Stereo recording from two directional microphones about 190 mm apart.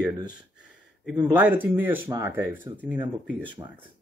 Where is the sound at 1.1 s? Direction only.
10° right (ahead or behind).